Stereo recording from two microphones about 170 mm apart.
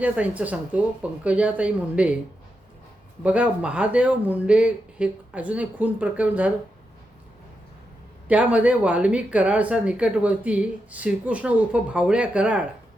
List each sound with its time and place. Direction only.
0.0 s a woman's voice: 10° right (ahead or behind)
3.2 s a woman's voice: 5° right (ahead or behind)
8.3 s a woman's voice: 10° right (ahead or behind)